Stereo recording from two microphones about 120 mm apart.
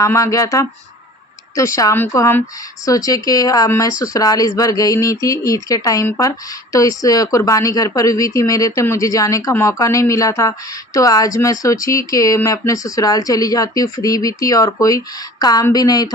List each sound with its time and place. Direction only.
0.0 s speech: 30° left (ahead or behind)